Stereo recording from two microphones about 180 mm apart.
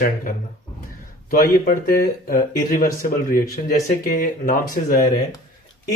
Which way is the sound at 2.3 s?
50° left (ahead or behind).